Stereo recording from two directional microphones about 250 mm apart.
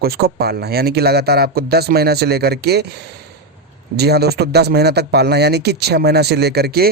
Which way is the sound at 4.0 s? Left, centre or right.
Right.